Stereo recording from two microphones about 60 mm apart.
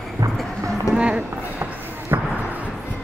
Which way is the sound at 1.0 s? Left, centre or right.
Centre.